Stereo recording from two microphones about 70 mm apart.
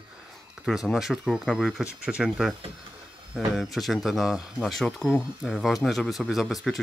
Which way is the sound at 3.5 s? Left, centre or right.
Centre.